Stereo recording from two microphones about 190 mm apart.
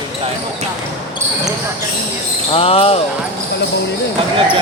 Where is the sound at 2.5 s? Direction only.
30° left (ahead or behind).